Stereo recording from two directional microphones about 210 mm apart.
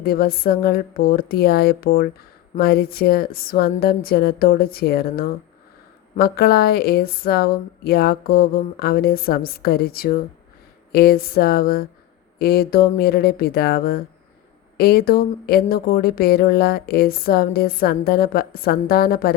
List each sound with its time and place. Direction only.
0.0 s speech: 45° left (ahead or behind)